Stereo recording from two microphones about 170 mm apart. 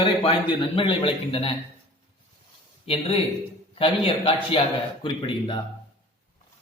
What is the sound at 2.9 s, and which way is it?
A man's voice, 35° left (ahead or behind).